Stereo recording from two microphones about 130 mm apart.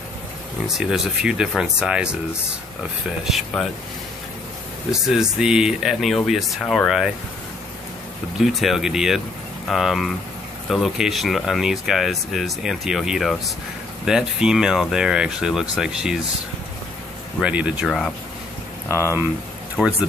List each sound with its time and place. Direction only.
0.7 s speech: 5° right (ahead or behind)
3.3 s speech: centre (ahead or behind)
5.0 s speech: 5° right (ahead or behind)
8.4 s speech: centre (ahead or behind)
17.4 s speech: 10° right (ahead or behind)
17.8 s speech: 5° left (ahead or behind)
18.9 s speech: 20° right (ahead or behind)
19.8 s speech: 5° right (ahead or behind)